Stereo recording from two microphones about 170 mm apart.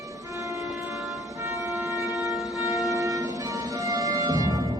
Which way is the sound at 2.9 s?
20° right (ahead or behind).